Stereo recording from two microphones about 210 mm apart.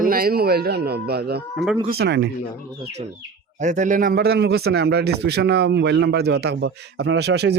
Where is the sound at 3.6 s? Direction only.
35° right (ahead or behind).